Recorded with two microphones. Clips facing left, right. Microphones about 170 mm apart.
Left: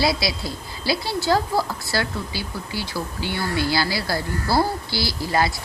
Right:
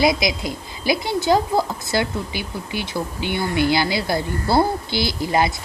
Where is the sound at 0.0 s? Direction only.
20° right (ahead or behind).